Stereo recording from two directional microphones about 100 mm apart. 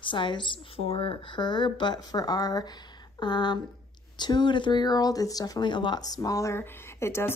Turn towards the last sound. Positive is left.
turn(degrees=25)  # may be behind; listen again after turning